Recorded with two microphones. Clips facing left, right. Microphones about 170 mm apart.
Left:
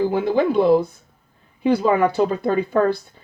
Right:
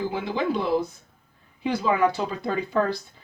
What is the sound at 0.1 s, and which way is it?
Speech, 50° left (ahead or behind).